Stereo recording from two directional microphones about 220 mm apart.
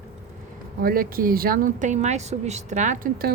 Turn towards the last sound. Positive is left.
turn(degrees=-35)  # may be behind; listen again after turning